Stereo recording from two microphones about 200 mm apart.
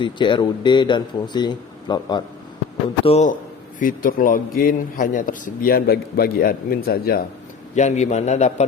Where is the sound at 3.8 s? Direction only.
45° left (ahead or behind).